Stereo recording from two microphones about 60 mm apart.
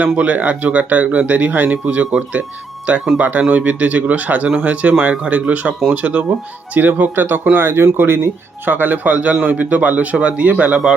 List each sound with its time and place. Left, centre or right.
0.0 s speech: right
3.2 s a man's voice: right
7.6 s a man's voice: right